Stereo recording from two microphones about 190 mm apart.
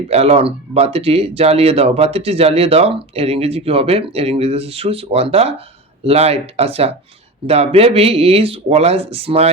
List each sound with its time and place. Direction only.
0.1 s speech: 35° right (ahead or behind)